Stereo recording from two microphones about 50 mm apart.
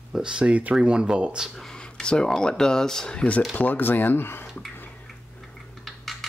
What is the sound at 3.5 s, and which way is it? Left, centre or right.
Speech, left.